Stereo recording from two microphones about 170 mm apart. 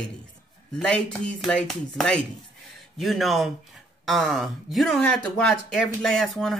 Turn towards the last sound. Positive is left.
turn(degrees=0)  # may be behind; listen again after turning